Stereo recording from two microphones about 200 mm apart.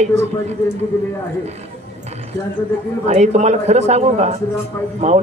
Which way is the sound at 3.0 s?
35° right (ahead or behind).